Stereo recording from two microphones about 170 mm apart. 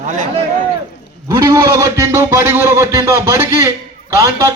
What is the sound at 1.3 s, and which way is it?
A man's voice, 15° right (ahead or behind).